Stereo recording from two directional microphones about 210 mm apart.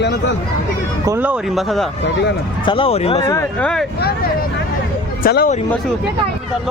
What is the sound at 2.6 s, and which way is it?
Speech, 25° left (ahead or behind).